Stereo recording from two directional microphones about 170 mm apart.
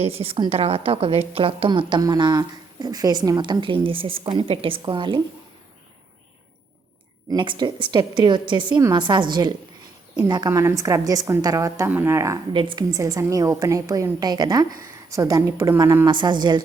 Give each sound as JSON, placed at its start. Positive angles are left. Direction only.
{"t": 0.0, "sound": "a woman's voice", "side_deg": -35}
{"t": 7.3, "sound": "speech", "side_deg": -25}
{"t": 12.5, "sound": "speech", "side_deg": -30}
{"t": 12.9, "sound": "speech", "side_deg": -20}